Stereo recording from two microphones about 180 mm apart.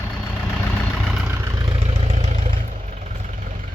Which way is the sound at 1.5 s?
25° right (ahead or behind).